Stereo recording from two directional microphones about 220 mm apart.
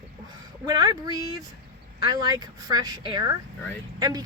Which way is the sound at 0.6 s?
20° right (ahead or behind).